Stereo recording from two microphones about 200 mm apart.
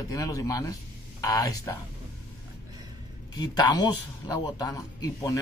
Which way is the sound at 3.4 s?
20° left (ahead or behind).